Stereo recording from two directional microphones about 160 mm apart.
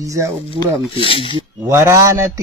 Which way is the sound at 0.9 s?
35° left (ahead or behind).